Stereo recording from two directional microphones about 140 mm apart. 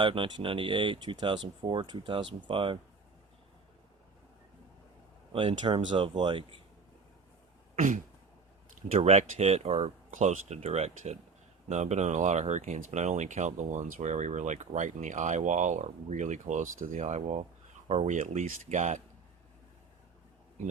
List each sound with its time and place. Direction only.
0.0 s speech: 35° right (ahead or behind)
5.3 s speech: 40° right (ahead or behind)
7.8 s a sound: 70° right (ahead or behind)
8.9 s speech: 50° right (ahead or behind)